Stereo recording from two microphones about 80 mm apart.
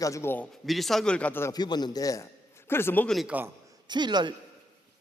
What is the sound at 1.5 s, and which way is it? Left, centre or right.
Speech, left.